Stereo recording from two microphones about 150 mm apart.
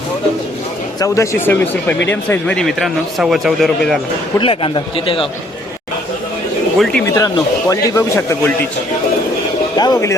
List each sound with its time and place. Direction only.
0.9 s speech: 20° left (ahead or behind); by 4.0 s centre (ahead or behind)
4.4 s a man's voice: 35° left (ahead or behind)
6.7 s speech: centre (ahead or behind)
7.0 s a man's voice: 20° left (ahead or behind)
9.7 s a man's voice: 25° left (ahead or behind)